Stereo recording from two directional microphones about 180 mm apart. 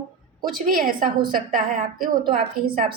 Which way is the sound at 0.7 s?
50° right (ahead or behind).